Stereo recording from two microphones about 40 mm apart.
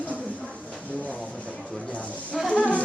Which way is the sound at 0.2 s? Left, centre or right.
Left.